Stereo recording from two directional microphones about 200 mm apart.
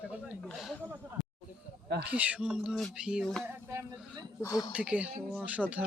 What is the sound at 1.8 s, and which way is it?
Speech, 55° right (ahead or behind).